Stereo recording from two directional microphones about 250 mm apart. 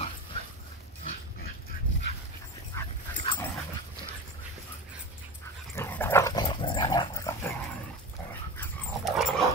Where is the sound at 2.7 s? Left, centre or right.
Centre.